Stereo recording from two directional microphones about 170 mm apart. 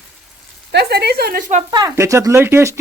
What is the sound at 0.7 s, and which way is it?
Speech, 75° right (ahead or behind).